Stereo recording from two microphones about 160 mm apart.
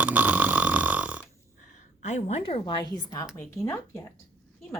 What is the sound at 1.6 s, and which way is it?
A woman's voice, 45° left (ahead or behind).